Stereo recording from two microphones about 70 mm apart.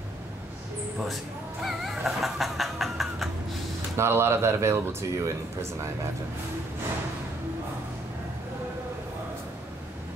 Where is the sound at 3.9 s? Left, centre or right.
Right.